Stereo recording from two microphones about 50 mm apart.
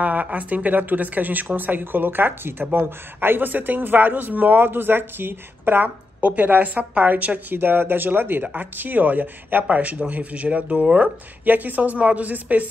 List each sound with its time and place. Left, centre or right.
0.0 s speech: right
7.5 s speech: right